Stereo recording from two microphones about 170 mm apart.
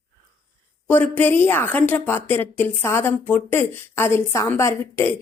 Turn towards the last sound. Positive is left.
turn(degrees=15)  # may be behind; listen again after turning